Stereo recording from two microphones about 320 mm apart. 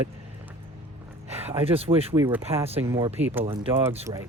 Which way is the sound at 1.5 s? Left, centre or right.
Centre.